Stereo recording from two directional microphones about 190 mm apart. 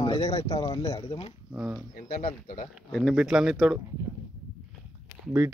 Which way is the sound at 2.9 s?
Centre (ahead or behind).